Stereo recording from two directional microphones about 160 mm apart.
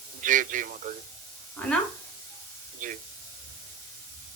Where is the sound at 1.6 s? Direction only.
10° left (ahead or behind).